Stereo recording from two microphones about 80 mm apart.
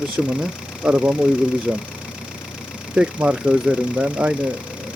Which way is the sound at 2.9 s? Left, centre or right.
Centre.